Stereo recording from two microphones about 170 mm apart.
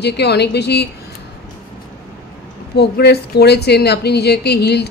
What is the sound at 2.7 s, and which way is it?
Speech, 75° left (ahead or behind).